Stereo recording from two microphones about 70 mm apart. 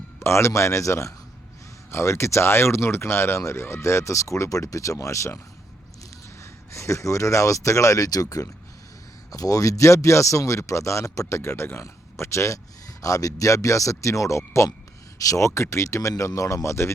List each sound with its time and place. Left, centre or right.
0.2 s speech: left
6.4 s speech: left
13.0 s speech: left